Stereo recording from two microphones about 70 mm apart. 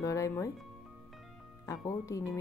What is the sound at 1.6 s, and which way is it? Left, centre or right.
Speech, left.